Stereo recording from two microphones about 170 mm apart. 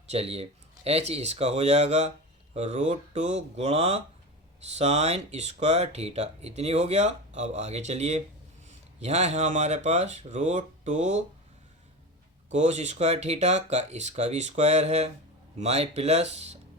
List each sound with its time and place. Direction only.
0.1 s speech: 35° right (ahead or behind)
12.5 s speech: 40° right (ahead or behind)